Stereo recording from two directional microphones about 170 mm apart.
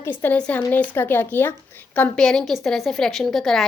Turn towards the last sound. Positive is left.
turn(degrees=0)  # may be behind; listen again after turning